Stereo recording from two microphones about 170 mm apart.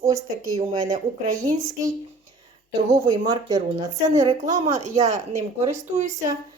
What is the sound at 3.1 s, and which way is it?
A woman's voice, 20° right (ahead or behind).